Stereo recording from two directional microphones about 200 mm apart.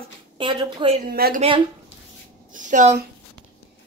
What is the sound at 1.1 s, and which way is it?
Speech, 50° right (ahead or behind).